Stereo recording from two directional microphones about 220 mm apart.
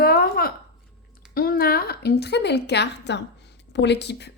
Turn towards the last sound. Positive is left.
turn(degrees=50)  # may be behind; listen again after turning